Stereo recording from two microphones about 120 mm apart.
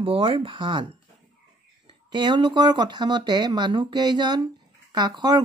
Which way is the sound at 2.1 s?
35° right (ahead or behind).